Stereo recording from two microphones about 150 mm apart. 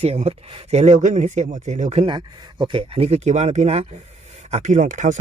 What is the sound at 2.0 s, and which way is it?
Speech, 30° right (ahead or behind).